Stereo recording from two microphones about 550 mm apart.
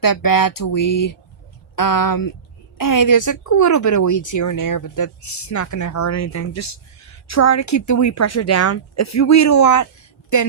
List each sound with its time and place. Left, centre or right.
0.0 s speech: left